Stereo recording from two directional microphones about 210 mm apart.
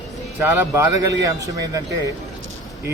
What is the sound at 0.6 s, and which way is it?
Speech, 15° right (ahead or behind).